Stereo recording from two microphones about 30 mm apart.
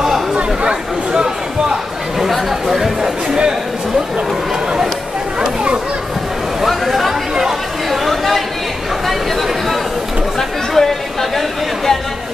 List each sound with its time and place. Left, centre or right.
0.4 s chatter: right
1.1 s a sound: right
2.1 s chatter: centre
3.0 s a sound: right
6.7 s chatter: centre
7.9 s chatter: centre
10.7 s chatter: centre